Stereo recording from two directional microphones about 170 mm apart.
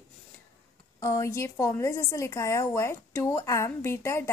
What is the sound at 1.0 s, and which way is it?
A woman's voice, 20° left (ahead or behind).